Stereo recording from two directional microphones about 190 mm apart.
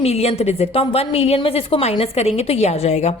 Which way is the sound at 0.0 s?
30° left (ahead or behind).